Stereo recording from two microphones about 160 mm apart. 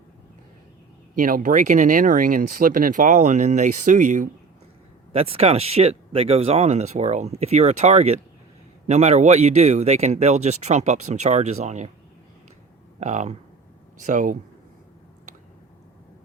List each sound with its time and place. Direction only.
1.1 s speech: 55° right (ahead or behind)
5.1 s speech: 35° right (ahead or behind)
13.0 s speech: 45° right (ahead or behind)